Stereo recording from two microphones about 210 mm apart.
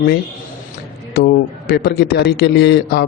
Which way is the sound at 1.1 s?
50° left (ahead or behind).